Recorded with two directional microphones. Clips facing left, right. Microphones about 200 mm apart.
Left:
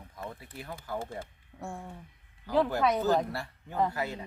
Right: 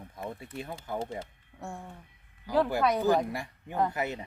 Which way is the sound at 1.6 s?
Centre (ahead or behind).